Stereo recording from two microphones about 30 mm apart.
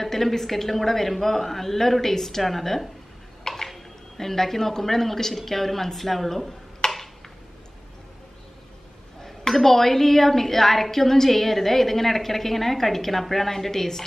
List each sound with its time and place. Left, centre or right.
0.0 s a woman's voice: centre
6.8 s tick-tock: centre
9.2 s a woman's voice: centre